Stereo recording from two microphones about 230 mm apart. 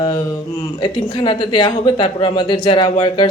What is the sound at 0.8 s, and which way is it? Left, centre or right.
Speech, centre.